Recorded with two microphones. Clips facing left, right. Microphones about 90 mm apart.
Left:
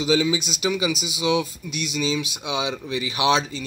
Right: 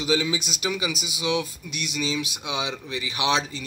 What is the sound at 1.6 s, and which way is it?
Speech, 5° right (ahead or behind).